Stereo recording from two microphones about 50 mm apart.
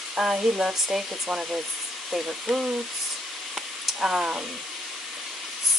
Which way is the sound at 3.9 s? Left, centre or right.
Centre.